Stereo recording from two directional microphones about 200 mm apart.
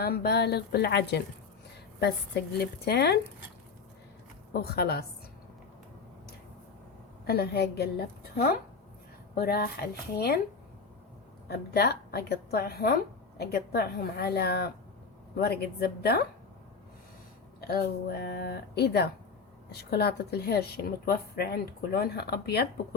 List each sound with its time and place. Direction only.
0.0 s speech: 50° left (ahead or behind)
4.6 s a woman's voice: 50° left (ahead or behind)
7.3 s a woman's voice: 55° left (ahead or behind)
11.4 s a woman's voice: 55° left (ahead or behind)
17.7 s a woman's voice: 50° left (ahead or behind)